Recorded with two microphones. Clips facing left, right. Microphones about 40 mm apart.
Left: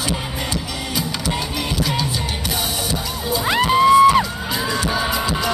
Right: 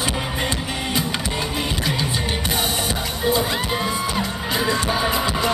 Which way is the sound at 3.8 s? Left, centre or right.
Left.